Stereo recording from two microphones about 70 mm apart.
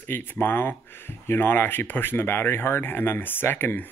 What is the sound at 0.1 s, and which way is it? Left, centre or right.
Speech, left.